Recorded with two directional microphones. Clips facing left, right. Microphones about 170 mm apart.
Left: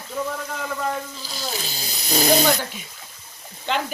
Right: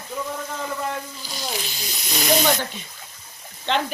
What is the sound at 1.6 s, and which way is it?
Speech, 35° left (ahead or behind).